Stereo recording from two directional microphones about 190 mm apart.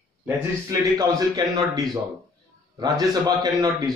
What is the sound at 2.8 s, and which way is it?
Speech, 20° right (ahead or behind).